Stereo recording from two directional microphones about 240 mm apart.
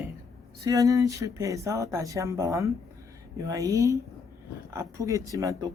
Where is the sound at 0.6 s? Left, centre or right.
Centre.